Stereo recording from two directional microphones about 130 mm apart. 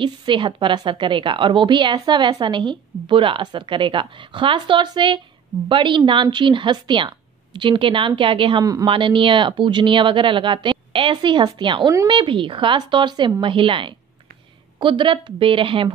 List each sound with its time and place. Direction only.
0.0 s a woman's voice: 35° right (ahead or behind)